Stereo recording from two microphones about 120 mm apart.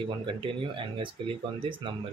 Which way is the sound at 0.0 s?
45° right (ahead or behind).